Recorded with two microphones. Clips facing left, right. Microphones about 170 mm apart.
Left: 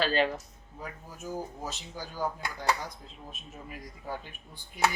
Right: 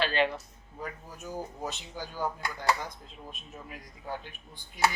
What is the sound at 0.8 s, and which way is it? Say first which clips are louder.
Speech: right 2 dB; centre (ahead or behind).